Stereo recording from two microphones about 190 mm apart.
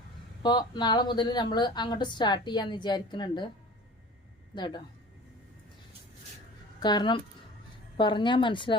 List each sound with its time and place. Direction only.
0.4 s a woman's voice: 20° left (ahead or behind)
4.5 s a woman's voice: 25° left (ahead or behind)
6.7 s a woman's voice: 20° left (ahead or behind)